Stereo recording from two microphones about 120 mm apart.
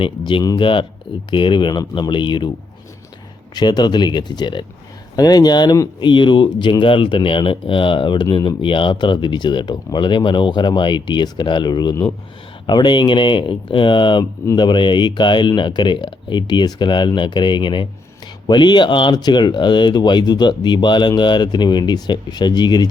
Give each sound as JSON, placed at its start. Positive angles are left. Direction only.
{"t": 0.0, "sound": "speech", "side_deg": 45}
{"t": 3.5, "sound": "speech", "side_deg": 40}